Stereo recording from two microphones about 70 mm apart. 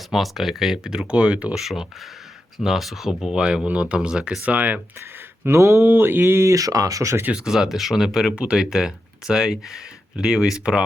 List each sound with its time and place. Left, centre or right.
0.1 s speech: centre
1.5 s speech: centre; by 5.0 s right
5.5 s speech: right
5.8 s speech: right
7.3 s speech: centre